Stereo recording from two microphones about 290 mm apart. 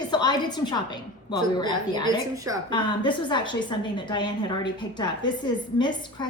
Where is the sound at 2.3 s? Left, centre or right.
Centre.